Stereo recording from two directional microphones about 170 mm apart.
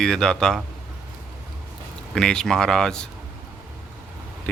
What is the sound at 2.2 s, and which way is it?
Speech, 5° left (ahead or behind).